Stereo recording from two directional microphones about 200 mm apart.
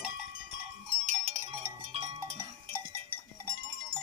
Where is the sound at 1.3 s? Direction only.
35° right (ahead or behind).